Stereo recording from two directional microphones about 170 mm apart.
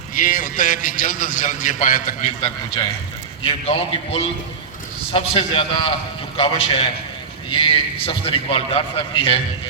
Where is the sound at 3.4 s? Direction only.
30° left (ahead or behind).